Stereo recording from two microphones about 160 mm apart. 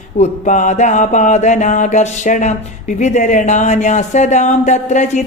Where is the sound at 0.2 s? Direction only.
50° left (ahead or behind).